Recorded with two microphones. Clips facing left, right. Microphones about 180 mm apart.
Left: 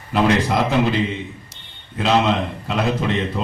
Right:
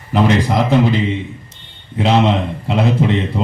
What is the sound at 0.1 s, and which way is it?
Speech, 20° right (ahead or behind).